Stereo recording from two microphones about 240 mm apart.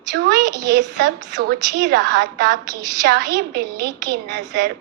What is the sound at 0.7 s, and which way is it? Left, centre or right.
A woman's voice, right.